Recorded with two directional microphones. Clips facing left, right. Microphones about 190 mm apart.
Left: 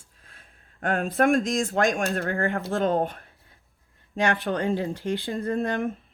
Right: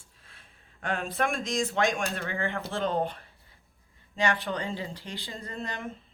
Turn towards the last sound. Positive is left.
turn(degrees=55)  # may be behind; listen again after turning